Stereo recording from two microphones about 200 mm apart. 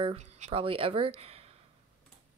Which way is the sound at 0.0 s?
30° right (ahead or behind).